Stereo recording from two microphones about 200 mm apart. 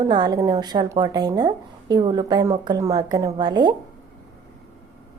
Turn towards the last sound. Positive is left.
turn(degrees=-20)  # may be behind; listen again after turning